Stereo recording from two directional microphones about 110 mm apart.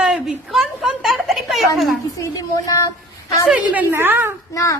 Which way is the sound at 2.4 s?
30° left (ahead or behind).